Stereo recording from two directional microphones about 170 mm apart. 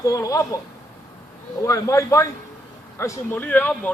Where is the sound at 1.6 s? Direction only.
20° left (ahead or behind).